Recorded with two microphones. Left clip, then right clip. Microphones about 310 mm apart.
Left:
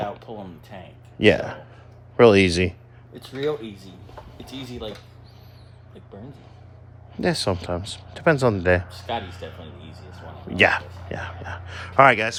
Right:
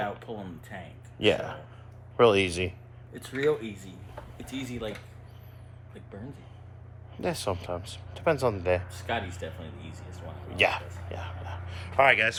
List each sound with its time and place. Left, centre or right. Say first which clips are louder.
0.0 s speech: left 3 dB; centre
1.2 s speech: left 7 dB; left
3.1 s speech: left 1 dB; centre
4.5 s speech: even; centre
7.2 s speech: left 7 dB; left
9.1 s speech: left 3 dB; centre
10.5 s speech: left 7 dB; left
12.1 s speech: left 1 dB; centre